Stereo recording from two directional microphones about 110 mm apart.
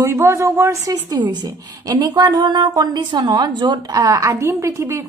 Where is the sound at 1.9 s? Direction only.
40° right (ahead or behind).